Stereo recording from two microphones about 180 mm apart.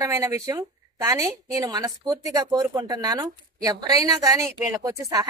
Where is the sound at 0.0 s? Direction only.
15° right (ahead or behind).